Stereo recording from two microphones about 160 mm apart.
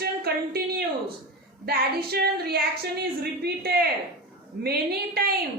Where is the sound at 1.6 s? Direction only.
80° right.